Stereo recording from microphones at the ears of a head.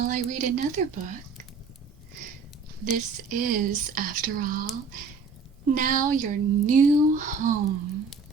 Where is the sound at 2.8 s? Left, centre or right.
Right.